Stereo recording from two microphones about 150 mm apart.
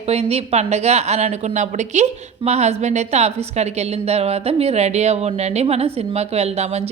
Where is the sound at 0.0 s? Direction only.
45° right (ahead or behind).